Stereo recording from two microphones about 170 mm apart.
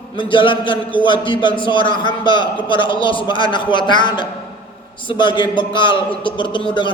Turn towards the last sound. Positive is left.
turn(degrees=30)  # may be behind; listen again after turning